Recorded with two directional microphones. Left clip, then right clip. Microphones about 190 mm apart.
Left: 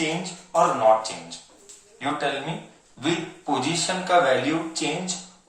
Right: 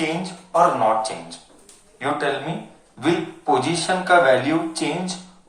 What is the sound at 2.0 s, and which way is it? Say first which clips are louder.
Speech: right 3 dB; 45° right (ahead or behind).